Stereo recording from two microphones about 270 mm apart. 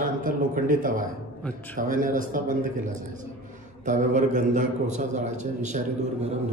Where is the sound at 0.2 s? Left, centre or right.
Right.